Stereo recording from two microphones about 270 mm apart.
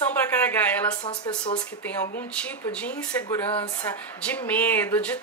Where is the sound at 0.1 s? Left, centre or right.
Centre.